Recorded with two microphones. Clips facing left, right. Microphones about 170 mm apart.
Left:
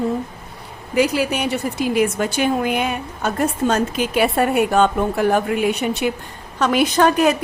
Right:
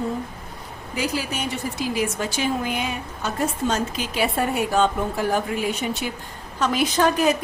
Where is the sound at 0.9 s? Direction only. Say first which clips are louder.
Left 8 dB; 65° left (ahead or behind).